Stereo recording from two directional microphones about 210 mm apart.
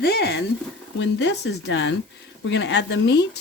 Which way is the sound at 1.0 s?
55° left (ahead or behind).